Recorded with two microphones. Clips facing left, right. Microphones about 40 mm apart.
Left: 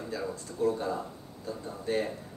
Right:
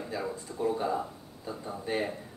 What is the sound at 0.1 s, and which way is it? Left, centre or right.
Speech, centre.